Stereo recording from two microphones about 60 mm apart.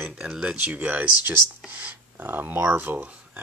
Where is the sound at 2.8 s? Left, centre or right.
Right.